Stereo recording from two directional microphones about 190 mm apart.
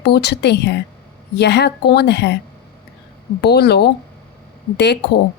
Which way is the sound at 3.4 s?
60° left (ahead or behind).